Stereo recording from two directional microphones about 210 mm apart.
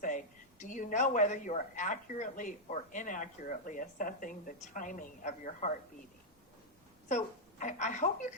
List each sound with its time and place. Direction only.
0.6 s speech: 35° left (ahead or behind)
7.1 s speech: 35° left (ahead or behind)